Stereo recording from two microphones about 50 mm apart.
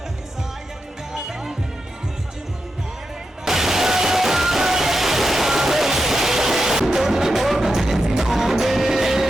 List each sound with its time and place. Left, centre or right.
1.1 s music: centre
3.4 s music: centre